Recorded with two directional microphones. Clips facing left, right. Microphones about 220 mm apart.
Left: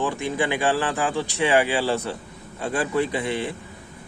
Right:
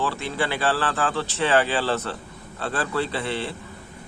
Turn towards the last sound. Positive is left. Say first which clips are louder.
# left 2 dB
turn(degrees=15)  # may be behind; listen again after turning